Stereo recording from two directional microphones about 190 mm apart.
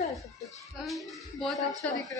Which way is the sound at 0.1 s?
Centre (ahead or behind).